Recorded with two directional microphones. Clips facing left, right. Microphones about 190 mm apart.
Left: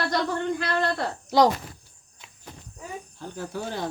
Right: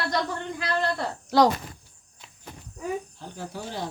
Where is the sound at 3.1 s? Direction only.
50° left (ahead or behind).